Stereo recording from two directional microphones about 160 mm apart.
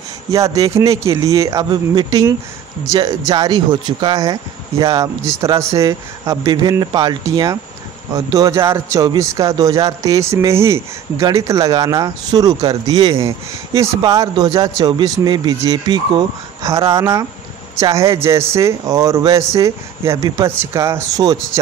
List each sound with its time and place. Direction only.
0.3 s a man's voice: 20° right (ahead or behind)